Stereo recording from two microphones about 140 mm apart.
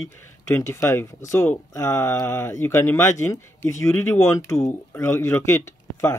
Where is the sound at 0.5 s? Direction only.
20° left (ahead or behind).